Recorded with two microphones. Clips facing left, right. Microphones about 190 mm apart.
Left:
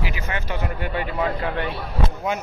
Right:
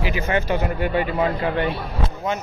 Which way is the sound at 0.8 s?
10° right (ahead or behind).